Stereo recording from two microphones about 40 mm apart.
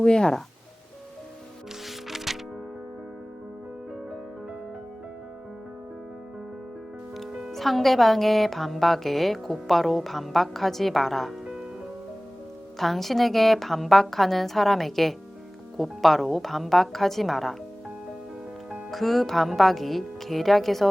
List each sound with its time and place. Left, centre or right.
0.0 s speech: centre
1.9 s music: centre
7.5 s a woman's voice: centre
11.4 s music: right
12.8 s a woman's voice: centre
18.9 s a woman's voice: centre